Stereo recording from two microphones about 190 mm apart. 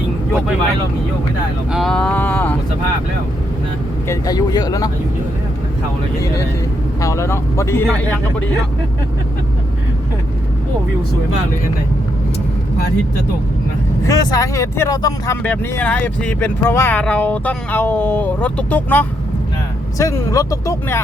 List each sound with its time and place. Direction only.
1.7 s speech: centre (ahead or behind)
4.1 s speech: 20° left (ahead or behind)
7.0 s speech: 15° left (ahead or behind)
14.0 s speech: 20° left (ahead or behind)
15.4 s speech: 10° left (ahead or behind)